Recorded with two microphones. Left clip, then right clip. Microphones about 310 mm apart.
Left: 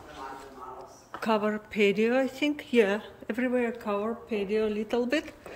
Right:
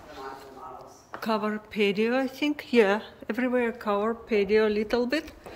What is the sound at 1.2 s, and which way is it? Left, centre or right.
Speech, centre.